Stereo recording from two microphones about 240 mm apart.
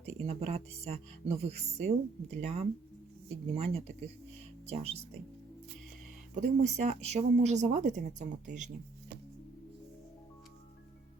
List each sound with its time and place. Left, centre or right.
0.0 s speech: right
6.3 s speech: right